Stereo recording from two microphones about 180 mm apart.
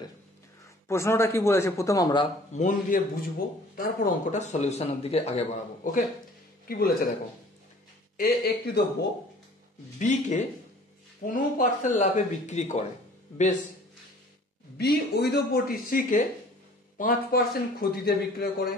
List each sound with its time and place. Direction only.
0.8 s speech: 15° left (ahead or behind)
2.5 s a man's voice: 45° left (ahead or behind)
6.7 s a man's voice: 55° left (ahead or behind)
8.2 s a man's voice: 60° left (ahead or behind)
9.9 s speech: 40° left (ahead or behind)
14.8 s a man's voice: 65° left (ahead or behind)